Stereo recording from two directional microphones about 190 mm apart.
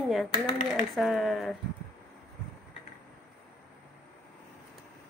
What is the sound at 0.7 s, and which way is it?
Speech, centre (ahead or behind).